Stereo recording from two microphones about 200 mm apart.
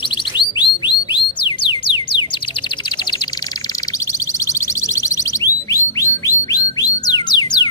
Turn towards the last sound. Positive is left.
turn(degrees=20)  # may be behind; listen again after turning